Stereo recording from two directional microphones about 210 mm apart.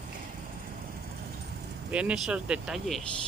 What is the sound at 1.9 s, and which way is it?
Speech, 5° right (ahead or behind).